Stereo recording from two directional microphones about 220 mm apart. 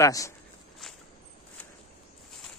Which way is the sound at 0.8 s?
Centre (ahead or behind).